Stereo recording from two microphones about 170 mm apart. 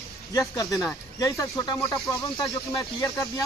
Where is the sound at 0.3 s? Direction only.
20° left (ahead or behind).